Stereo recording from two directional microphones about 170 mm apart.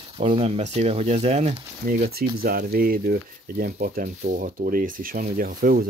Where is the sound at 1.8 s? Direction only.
60° right (ahead or behind).